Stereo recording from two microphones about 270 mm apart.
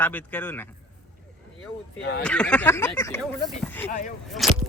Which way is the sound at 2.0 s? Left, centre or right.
Left.